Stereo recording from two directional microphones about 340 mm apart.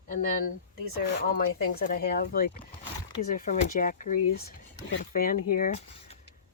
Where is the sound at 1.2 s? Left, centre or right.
Left.